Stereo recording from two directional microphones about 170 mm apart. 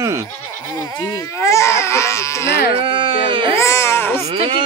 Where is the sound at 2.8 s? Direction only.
30° right (ahead or behind).